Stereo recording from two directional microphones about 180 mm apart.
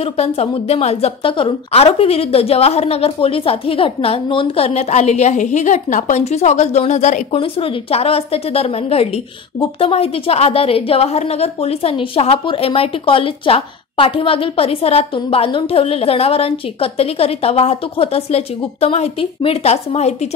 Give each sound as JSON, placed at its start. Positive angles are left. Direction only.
{"t": 0.0, "sound": "a woman's voice", "side_deg": 35}